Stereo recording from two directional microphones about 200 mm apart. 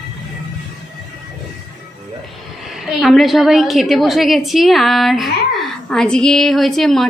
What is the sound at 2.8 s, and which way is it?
A woman's voice, centre (ahead or behind).